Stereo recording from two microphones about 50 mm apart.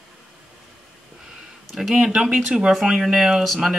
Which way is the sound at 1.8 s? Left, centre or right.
Centre.